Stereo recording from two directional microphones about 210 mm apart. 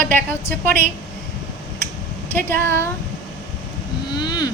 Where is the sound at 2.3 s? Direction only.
10° left (ahead or behind).